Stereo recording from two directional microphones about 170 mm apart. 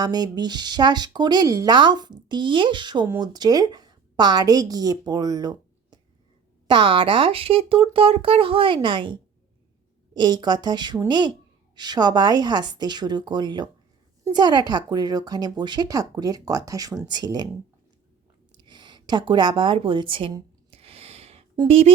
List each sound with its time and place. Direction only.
0.0 s a woman's voice: 25° right (ahead or behind)
10.2 s speech: 25° right (ahead or behind)
18.5 s a woman's voice: 25° right (ahead or behind)
20.7 s a sound: 35° right (ahead or behind)
21.7 s speech: 35° right (ahead or behind)